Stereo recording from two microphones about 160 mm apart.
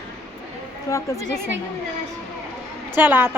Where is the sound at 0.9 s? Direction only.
20° left (ahead or behind).